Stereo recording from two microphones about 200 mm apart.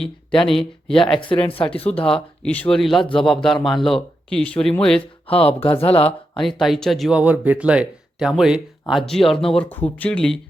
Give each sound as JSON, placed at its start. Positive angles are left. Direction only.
{"t": 1.0, "sound": "speech", "side_deg": 25}
{"t": 1.9, "sound": "speech", "side_deg": 5}
{"t": 4.9, "sound": "speech", "side_deg": 30}
{"t": 6.1, "sound": "speech", "side_deg": 0}